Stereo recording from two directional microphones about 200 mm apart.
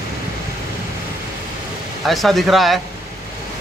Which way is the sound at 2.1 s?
Centre (ahead or behind).